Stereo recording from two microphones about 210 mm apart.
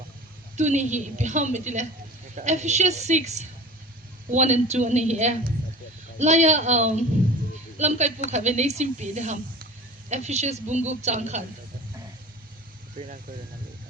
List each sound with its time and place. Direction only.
0.5 s a woman's voice: 35° right (ahead or behind)